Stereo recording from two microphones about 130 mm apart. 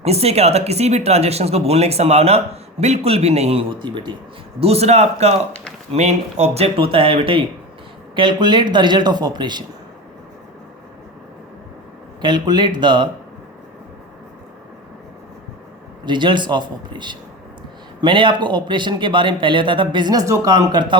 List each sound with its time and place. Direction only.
0.0 s speech: 55° right (ahead or behind); by 4.1 s 35° right (ahead or behind)
4.6 s a man's voice: 50° right (ahead or behind); by 9.6 s 35° right (ahead or behind)
12.2 s a man's voice: 35° right (ahead or behind)
16.0 s a man's voice: 35° right (ahead or behind)